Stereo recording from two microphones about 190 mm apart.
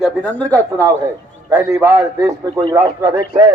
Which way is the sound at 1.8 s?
15° right (ahead or behind).